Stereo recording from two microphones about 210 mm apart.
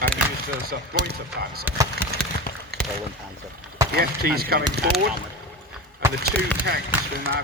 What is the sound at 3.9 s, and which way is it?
Speech, 45° right (ahead or behind).